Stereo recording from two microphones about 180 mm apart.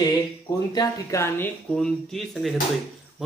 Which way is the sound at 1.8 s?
Centre (ahead or behind).